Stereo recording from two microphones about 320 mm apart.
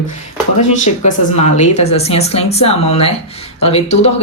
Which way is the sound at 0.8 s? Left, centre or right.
Left.